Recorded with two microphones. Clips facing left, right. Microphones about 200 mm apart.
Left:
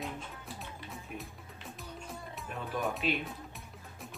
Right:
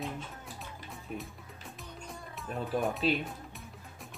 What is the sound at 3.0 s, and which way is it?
Speech, 35° right (ahead or behind).